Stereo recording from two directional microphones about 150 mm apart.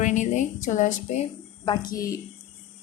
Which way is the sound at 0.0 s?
55° left (ahead or behind).